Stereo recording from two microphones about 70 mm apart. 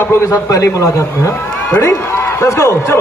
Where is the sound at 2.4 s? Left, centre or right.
Left.